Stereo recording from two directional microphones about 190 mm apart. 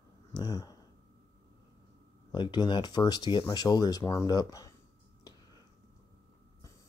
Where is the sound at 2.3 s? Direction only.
25° left (ahead or behind).